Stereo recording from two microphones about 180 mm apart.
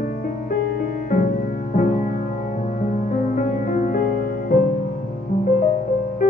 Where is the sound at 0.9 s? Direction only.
50° left (ahead or behind).